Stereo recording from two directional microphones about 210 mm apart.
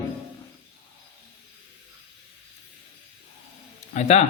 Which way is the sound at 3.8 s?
30° left (ahead or behind).